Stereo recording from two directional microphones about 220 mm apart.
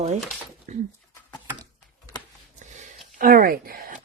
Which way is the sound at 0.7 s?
35° right (ahead or behind).